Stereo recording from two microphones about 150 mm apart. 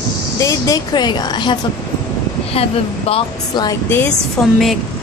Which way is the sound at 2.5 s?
40° left (ahead or behind).